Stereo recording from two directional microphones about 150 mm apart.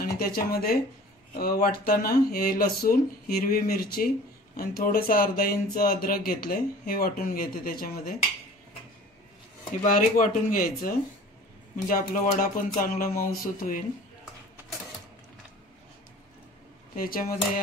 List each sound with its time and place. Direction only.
0.0 s speech: 85° left
9.8 s speech: 60° left (ahead or behind)
16.9 s speech: 70° left (ahead or behind)